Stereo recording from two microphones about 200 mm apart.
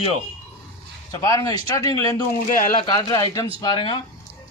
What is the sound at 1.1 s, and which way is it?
A man's voice, 20° left (ahead or behind).